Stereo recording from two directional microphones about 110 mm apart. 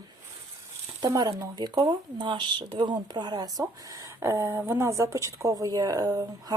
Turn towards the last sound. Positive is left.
turn(degrees=-35)  # may be behind; listen again after turning